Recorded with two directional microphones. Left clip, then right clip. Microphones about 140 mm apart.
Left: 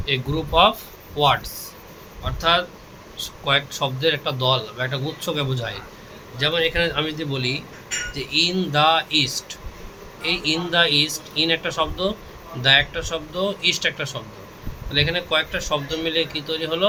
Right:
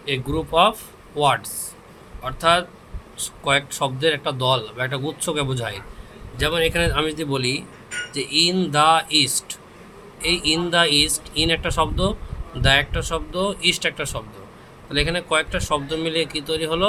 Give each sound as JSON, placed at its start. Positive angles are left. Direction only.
{"t": 0.0, "sound": "speech", "side_deg": -35}
{"t": 2.2, "sound": "a man's voice", "side_deg": -45}
{"t": 6.4, "sound": "a man's voice", "side_deg": -60}